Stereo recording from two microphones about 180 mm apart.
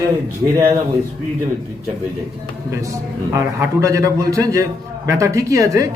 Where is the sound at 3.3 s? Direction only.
15° right (ahead or behind).